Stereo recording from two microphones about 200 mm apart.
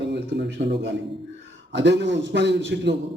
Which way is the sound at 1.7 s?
60° right (ahead or behind).